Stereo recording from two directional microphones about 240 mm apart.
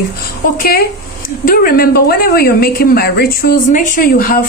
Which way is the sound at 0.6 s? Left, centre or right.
Left.